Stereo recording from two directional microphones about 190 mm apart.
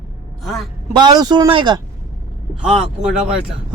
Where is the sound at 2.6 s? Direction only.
5° right (ahead or behind).